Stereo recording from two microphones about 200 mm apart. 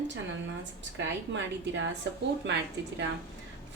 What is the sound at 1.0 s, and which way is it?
A woman's voice, 65° right (ahead or behind).